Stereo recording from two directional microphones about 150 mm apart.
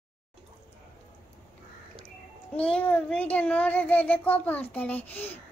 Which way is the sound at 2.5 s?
10° left (ahead or behind).